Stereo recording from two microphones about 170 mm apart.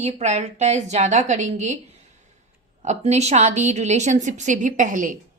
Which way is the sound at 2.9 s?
40° right (ahead or behind).